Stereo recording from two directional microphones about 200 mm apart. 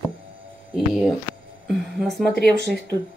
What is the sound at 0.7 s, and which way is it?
Speech, centre (ahead or behind).